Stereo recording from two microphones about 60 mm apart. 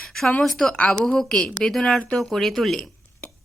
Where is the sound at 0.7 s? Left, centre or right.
Left.